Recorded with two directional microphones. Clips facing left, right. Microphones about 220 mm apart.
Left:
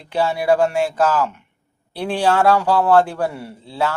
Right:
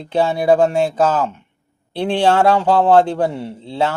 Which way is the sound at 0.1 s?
25° right (ahead or behind).